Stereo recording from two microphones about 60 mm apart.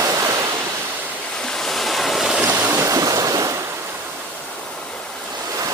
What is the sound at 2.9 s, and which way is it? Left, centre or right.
Waves, right.